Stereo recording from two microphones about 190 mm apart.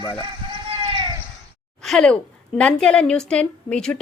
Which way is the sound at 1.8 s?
Centre (ahead or behind).